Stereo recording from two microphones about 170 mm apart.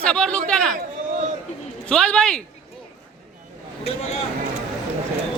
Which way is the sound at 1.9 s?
5° left (ahead or behind).